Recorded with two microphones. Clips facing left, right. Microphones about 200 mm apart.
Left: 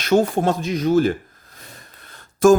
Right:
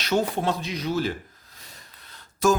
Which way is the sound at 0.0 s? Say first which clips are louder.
Left 7 dB; 50° left (ahead or behind).